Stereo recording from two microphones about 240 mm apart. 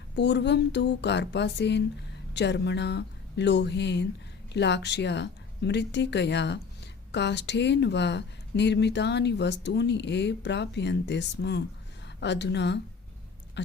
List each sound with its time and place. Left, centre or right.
0.2 s speech: left